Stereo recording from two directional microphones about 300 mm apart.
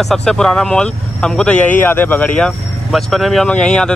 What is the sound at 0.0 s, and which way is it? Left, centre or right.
Speech, centre.